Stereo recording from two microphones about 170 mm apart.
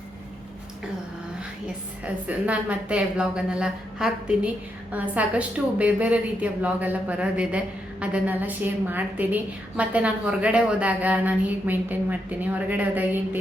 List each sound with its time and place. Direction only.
1.6 s a woman's voice: 10° right (ahead or behind)